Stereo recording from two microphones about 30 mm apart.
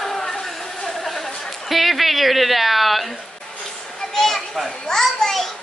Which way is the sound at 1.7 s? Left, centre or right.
Centre.